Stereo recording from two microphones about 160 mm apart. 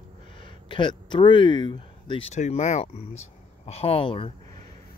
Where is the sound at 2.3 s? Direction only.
45° left (ahead or behind).